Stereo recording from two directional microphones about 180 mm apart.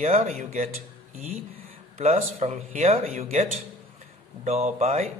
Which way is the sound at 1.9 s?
35° right (ahead or behind).